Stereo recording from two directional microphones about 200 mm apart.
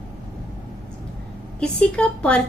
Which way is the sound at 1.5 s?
5° left (ahead or behind).